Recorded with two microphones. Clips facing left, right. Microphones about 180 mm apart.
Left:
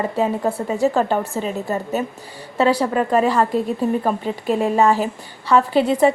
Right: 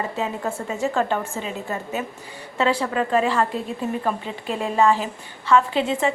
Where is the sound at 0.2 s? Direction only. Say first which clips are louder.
Left 6 dB; 35° left (ahead or behind).